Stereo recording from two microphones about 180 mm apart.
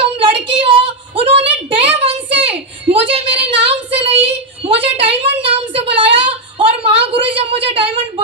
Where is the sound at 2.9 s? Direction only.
30° right (ahead or behind).